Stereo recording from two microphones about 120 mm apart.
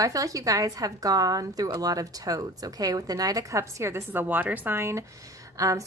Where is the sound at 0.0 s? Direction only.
30° right (ahead or behind).